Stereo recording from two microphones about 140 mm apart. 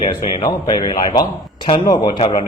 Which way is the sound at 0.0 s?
30° left (ahead or behind).